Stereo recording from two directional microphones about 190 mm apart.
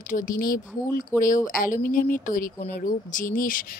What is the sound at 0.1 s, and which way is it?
Speech, 45° left (ahead or behind).